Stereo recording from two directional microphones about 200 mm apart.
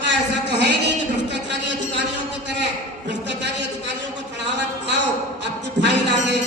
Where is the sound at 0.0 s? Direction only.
60° right (ahead or behind).